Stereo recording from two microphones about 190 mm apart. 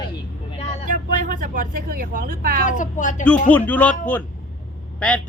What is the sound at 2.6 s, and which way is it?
Speech, 40° left (ahead or behind).